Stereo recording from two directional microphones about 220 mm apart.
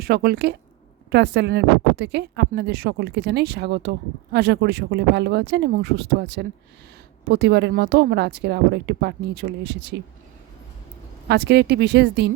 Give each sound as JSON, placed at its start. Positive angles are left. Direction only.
{"t": 0.0, "sound": "speech", "side_deg": -45}
{"t": 11.3, "sound": "speech", "side_deg": -50}